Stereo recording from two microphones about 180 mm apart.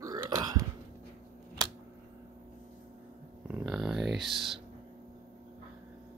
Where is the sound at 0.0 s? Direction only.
20° right (ahead or behind).